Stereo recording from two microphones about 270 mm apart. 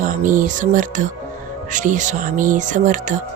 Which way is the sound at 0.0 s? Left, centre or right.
Right.